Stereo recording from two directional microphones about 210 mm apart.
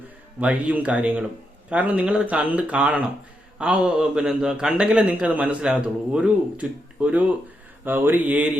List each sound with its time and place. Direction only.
0.3 s a man's voice: 5° right (ahead or behind)